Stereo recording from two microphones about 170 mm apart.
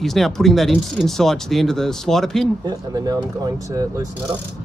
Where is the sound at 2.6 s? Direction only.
20° right (ahead or behind).